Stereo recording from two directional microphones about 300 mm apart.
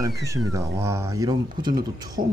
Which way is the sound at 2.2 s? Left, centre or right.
Right.